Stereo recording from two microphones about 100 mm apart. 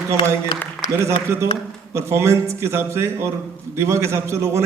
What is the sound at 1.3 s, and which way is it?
A man's voice, 25° right (ahead or behind).